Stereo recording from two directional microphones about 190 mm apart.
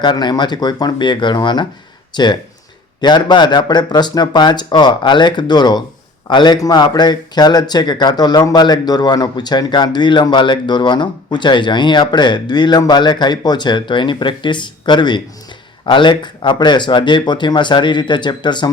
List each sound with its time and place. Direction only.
0.0 s speech: 25° left (ahead or behind)